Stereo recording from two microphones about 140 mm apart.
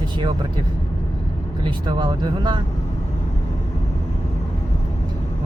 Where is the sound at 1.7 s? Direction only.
35° right (ahead or behind).